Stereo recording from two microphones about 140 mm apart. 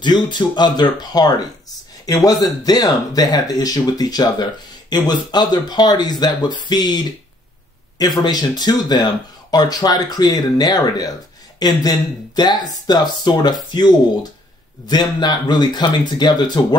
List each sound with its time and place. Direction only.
0.0 s speech: 30° left (ahead or behind)